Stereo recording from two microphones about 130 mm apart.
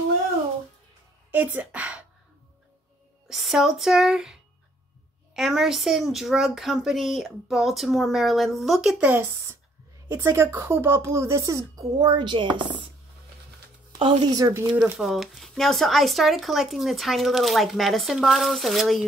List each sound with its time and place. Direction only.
1.3 s speech: 15° right (ahead or behind)
3.3 s speech: centre (ahead or behind)
9.0 s speech: 15° right (ahead or behind); by 12.8 s 40° right (ahead or behind)
13.9 s a woman's voice: 40° right (ahead or behind)
14.3 s speech: 25° right (ahead or behind)
15.0 s speech: centre (ahead or behind)